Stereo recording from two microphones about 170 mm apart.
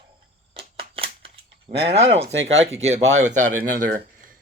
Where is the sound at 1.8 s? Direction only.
35° right (ahead or behind).